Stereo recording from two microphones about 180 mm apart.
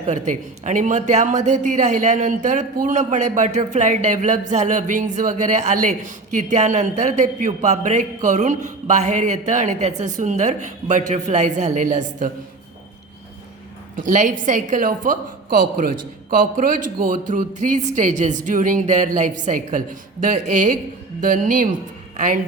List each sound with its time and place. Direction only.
0.1 s a woman's voice: 40° right (ahead or behind)
13.9 s a woman's voice: 45° right (ahead or behind)